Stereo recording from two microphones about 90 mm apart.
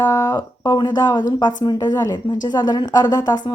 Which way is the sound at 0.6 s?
55° left (ahead or behind).